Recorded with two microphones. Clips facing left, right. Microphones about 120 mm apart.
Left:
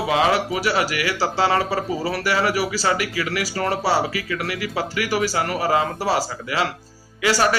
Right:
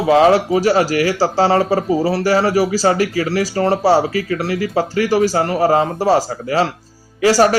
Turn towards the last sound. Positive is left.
turn(degrees=-40)  # may be behind; listen again after turning